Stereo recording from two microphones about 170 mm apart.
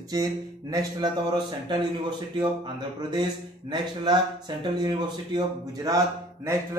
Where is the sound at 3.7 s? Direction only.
25° right (ahead or behind).